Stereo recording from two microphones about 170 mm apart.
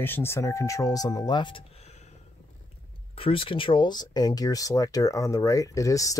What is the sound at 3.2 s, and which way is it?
Speech, 30° left (ahead or behind).